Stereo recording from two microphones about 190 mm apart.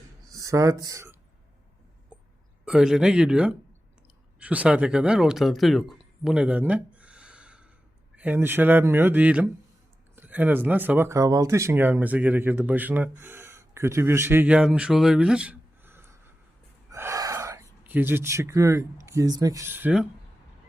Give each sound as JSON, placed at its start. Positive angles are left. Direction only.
{"t": 0.3, "sound": "speech", "side_deg": -15}
{"t": 2.6, "sound": "speech", "side_deg": -5}